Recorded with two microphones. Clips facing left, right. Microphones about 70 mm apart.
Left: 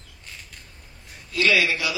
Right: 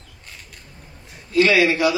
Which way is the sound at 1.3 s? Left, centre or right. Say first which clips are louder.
Right 5 dB; right.